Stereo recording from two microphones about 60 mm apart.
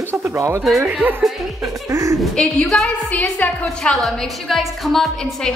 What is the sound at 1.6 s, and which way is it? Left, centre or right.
Music, right.